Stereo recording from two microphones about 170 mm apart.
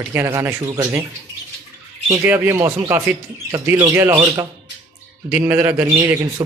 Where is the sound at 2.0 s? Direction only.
15° right (ahead or behind).